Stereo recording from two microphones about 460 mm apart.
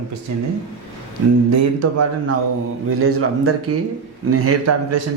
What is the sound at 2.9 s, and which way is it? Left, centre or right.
A man's voice, right.